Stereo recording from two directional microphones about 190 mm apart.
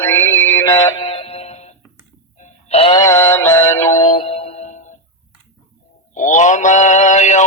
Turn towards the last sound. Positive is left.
turn(degrees=40)  # may be behind; listen again after turning